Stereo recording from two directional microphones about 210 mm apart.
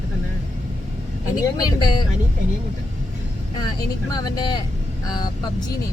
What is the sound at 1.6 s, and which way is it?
Speech, 20° left (ahead or behind).